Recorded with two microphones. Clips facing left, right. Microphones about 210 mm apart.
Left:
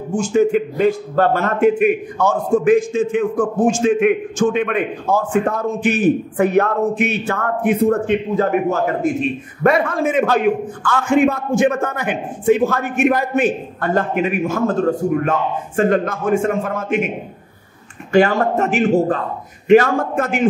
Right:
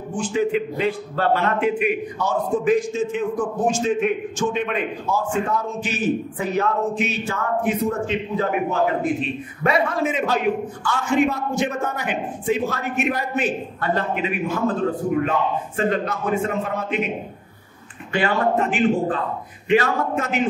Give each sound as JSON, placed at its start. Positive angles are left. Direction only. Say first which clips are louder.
{"t": 0.1, "sound": "a man's voice", "louder": "left 6 dB", "side_deg": 45}
{"t": 18.1, "sound": "a man's voice", "louder": "left 6 dB", "side_deg": 45}